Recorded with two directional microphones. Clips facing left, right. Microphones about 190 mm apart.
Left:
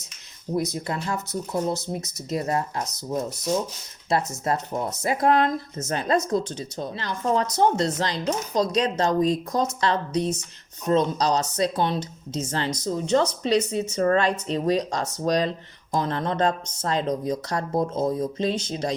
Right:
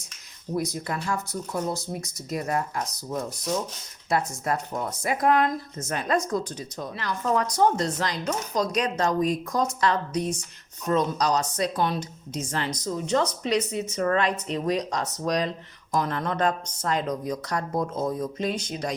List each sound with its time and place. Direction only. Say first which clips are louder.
0.5 s speech: left 2 dB; 20° left (ahead or behind)